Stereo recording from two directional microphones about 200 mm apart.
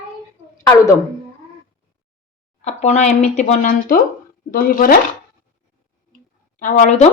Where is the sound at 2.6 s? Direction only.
35° left (ahead or behind).